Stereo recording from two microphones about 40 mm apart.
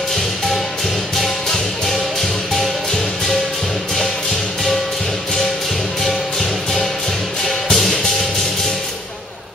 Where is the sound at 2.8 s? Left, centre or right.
Centre.